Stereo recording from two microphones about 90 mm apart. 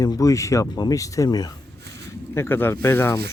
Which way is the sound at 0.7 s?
45° left (ahead or behind).